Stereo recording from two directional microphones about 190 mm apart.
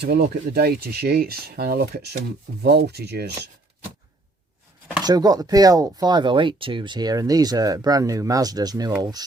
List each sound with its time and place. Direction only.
0.0 s speech: 55° right (ahead or behind)
5.0 s speech: 20° right (ahead or behind)